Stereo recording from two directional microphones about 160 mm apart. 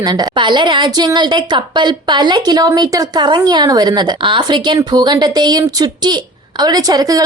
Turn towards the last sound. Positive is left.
turn(degrees=-25)  # may be behind; listen again after turning